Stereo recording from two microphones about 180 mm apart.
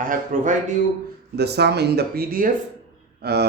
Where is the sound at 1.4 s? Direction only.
65° right (ahead or behind).